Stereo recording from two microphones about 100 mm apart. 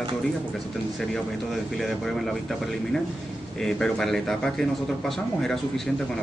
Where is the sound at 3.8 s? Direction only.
5° left (ahead or behind).